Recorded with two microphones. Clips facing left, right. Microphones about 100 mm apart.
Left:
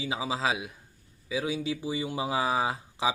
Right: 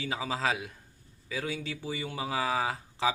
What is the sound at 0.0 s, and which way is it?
Speech, 15° left (ahead or behind).